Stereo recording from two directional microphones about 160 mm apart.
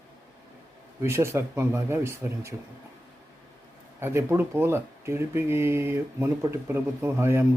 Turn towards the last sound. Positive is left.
turn(degrees=-15)  # may be behind; listen again after turning